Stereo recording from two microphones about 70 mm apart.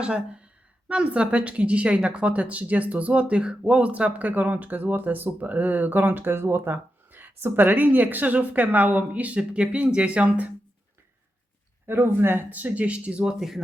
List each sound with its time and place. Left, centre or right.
0.0 s speech: centre
11.9 s speech: right; by 13.6 s centre